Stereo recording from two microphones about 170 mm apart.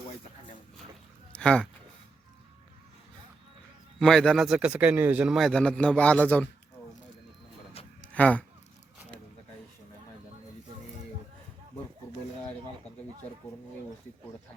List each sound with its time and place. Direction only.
1.4 s speech: 5° left (ahead or behind)
4.0 s a man's voice: centre (ahead or behind)
8.0 s a sound: 10° left (ahead or behind)